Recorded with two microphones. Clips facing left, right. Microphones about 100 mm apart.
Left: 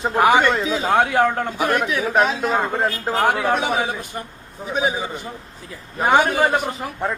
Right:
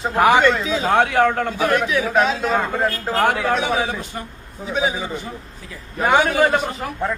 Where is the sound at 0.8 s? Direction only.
5° left (ahead or behind).